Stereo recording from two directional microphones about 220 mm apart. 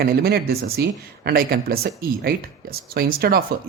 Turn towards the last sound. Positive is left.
turn(degrees=-45)  # may be behind; listen again after turning